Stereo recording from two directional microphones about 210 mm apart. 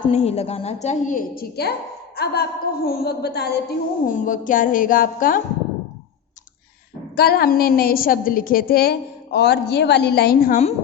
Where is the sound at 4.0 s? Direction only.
40° left (ahead or behind).